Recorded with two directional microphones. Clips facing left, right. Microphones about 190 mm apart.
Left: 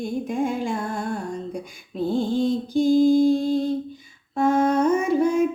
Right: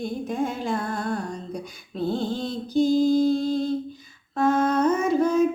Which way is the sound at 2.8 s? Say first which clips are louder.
Left 3 dB; 50° left (ahead or behind).